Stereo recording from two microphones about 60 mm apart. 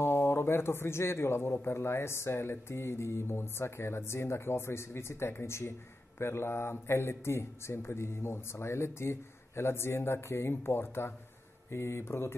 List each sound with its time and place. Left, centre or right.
0.0 s a man's voice: left